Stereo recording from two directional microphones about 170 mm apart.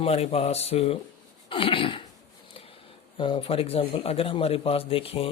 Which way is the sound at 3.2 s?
30° left (ahead or behind).